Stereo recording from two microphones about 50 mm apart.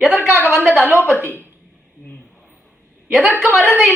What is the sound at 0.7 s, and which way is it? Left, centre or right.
Speech, right.